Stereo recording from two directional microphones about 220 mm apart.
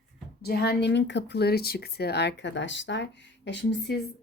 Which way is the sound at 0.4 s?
45° left (ahead or behind).